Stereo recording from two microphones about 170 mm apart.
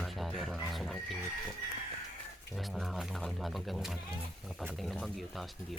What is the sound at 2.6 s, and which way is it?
Speech, centre (ahead or behind).